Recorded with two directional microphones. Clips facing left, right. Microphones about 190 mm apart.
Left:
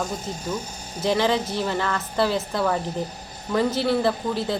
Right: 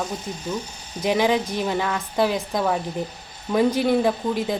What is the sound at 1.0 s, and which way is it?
Speech, 15° right (ahead or behind).